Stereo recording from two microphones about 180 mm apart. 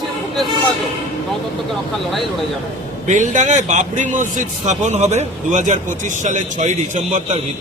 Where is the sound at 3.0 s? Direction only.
45° right (ahead or behind).